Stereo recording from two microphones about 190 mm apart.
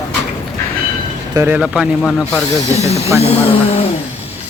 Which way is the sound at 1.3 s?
10° right (ahead or behind).